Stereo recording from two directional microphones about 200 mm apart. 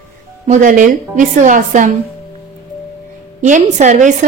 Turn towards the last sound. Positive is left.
turn(degrees=-40)  # may be behind; listen again after turning